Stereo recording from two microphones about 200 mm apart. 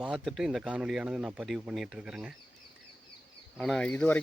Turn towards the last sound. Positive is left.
turn(degrees=5)  # may be behind; listen again after turning